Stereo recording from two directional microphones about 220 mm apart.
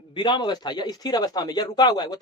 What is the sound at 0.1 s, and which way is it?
Speech, 20° left (ahead or behind).